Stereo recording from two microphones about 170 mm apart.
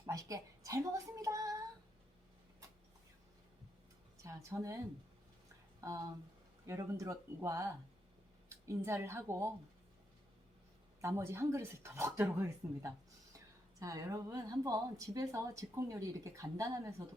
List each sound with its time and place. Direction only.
0.0 s speech: 20° right (ahead or behind)
4.2 s a woman's voice: 15° right (ahead or behind)
5.8 s a woman's voice: 15° right (ahead or behind)
11.0 s a woman's voice: 15° right (ahead or behind)